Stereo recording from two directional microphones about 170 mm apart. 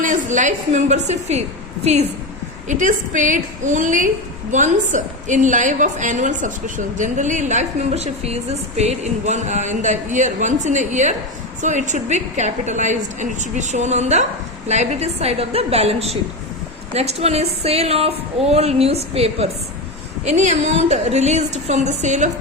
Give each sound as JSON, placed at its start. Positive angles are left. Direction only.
{"t": 0.0, "sound": "a woman's voice", "side_deg": -45}